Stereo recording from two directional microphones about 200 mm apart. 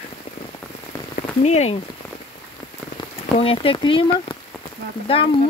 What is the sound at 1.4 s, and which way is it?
Speech, 35° left (ahead or behind).